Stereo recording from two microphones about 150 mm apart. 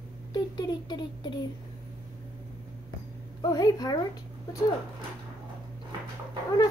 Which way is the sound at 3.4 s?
25° left (ahead or behind).